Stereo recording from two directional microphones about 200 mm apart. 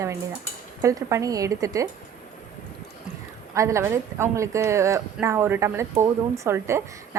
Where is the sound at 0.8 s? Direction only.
15° right (ahead or behind).